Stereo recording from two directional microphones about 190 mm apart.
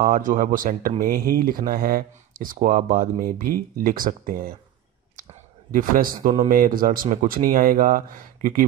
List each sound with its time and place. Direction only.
0.0 s speech: 45° right (ahead or behind)
5.7 s speech: 45° right (ahead or behind)